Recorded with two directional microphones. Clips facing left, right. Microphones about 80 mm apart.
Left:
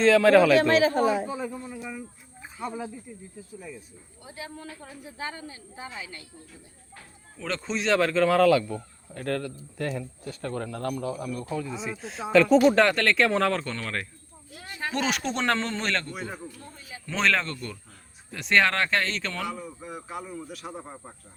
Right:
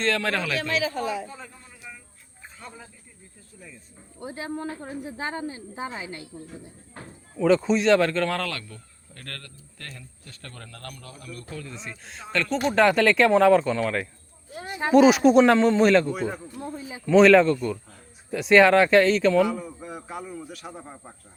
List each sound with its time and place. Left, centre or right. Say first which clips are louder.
0.0 s speech: left 9 dB; centre
0.7 s a sound: left 6 dB; left
1.9 s a sound: left 8 dB; centre
3.5 s a man's voice: left 5 dB; centre
4.2 s speech: right 8 dB; right
7.3 s a man's voice: right 11 dB; centre
14.5 s a sound: right 6 dB; right
14.9 s speech: right 14 dB; centre
16.6 s speech: right 9 dB; centre